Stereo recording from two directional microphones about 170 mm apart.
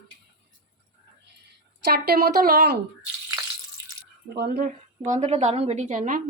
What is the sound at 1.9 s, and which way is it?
Speech, 65° right (ahead or behind).